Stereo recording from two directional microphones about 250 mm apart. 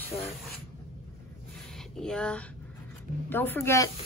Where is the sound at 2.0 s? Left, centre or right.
Centre.